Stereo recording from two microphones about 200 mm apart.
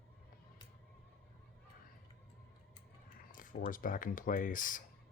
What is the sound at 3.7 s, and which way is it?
Speech, 45° left (ahead or behind).